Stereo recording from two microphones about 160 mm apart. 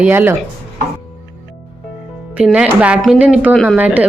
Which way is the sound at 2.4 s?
10° right (ahead or behind).